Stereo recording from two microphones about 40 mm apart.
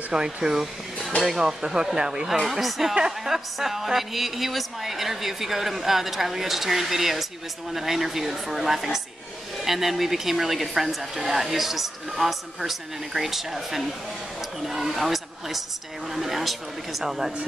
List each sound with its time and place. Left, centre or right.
0.1 s a woman's voice: centre